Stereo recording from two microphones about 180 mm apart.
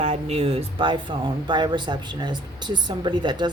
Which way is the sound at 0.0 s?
35° right (ahead or behind).